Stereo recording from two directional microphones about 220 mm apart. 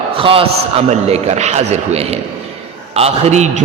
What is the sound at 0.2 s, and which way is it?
A man's voice, 25° right (ahead or behind).